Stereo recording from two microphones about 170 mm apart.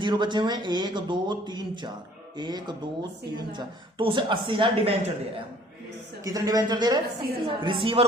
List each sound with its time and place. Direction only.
0.0 s a woman's voice: 25° right (ahead or behind)
6.2 s a woman's voice: 20° right (ahead or behind)